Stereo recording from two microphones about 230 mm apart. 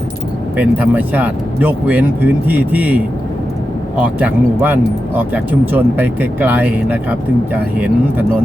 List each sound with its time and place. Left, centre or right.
0.5 s speech: centre
4.0 s speech: centre